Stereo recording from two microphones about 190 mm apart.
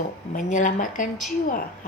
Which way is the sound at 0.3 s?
40° left (ahead or behind).